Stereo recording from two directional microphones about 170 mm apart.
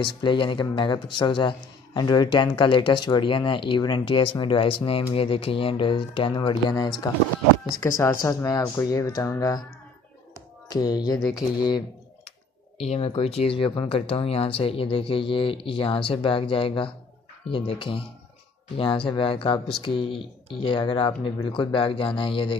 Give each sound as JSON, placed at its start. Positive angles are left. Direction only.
{"t": 0.0, "sound": "speech", "side_deg": 30}
{"t": 10.7, "sound": "speech", "side_deg": 25}
{"t": 11.2, "sound": "speech", "side_deg": 0}
{"t": 12.3, "sound": "speech", "side_deg": 35}